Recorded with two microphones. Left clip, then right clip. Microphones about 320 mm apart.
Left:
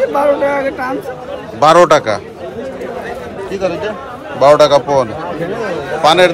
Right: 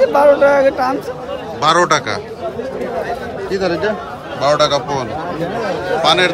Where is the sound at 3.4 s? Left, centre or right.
Right.